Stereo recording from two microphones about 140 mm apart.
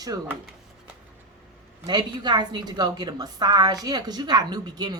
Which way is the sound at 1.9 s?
30° right (ahead or behind).